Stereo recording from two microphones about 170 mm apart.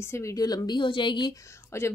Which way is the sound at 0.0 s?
15° left (ahead or behind).